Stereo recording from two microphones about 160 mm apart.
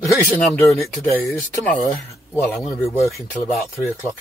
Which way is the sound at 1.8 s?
10° left (ahead or behind).